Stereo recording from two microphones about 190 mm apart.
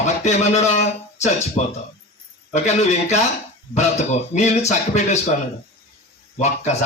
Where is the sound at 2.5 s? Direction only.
35° left (ahead or behind).